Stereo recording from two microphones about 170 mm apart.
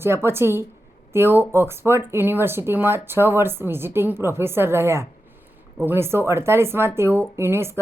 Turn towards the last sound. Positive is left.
turn(degrees=-15)  # may be behind; listen again after turning